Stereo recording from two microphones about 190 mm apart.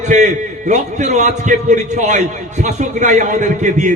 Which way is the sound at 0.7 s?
40° right (ahead or behind).